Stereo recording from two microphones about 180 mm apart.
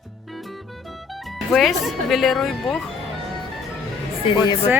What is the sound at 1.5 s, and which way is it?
Speech, centre (ahead or behind).